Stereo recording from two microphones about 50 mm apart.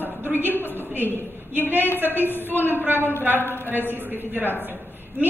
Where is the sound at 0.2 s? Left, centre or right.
Right.